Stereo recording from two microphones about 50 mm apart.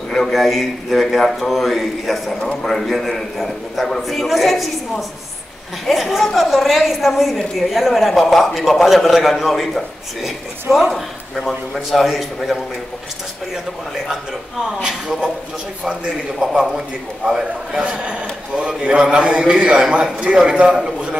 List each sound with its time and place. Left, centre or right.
0.1 s a woman's voice: centre
14.8 s a man's voice: centre